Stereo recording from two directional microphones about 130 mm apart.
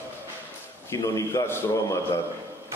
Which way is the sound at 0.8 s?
25° left (ahead or behind).